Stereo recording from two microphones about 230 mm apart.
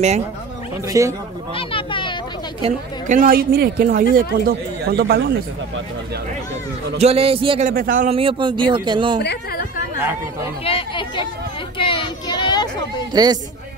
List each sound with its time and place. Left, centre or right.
0.8 s a man's voice: centre
1.5 s a sound: left
3.1 s speech: right
7.0 s a man's voice: right
7.7 s a man's voice: right; by 9.2 s centre
9.2 s speech: left
10.6 s chatter: left
11.9 s a sound: centre
13.1 s a man's voice: centre